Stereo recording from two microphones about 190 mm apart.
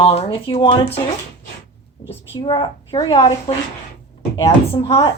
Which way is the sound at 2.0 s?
30° left (ahead or behind).